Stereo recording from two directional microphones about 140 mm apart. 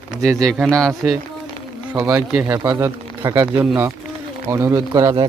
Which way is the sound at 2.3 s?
10° right (ahead or behind).